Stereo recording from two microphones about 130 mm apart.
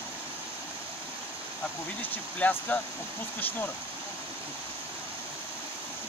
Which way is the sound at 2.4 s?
10° left (ahead or behind).